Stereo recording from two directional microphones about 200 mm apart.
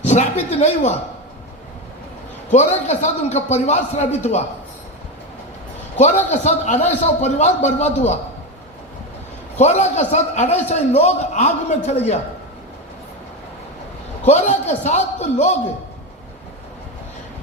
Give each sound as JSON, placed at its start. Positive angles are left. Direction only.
{"t": 0.0, "sound": "a man's voice", "side_deg": 35}
{"t": 2.5, "sound": "a man's voice", "side_deg": 35}
{"t": 6.0, "sound": "a man's voice", "side_deg": 35}
{"t": 9.6, "sound": "a man's voice", "side_deg": 35}
{"t": 14.3, "sound": "a man's voice", "side_deg": 35}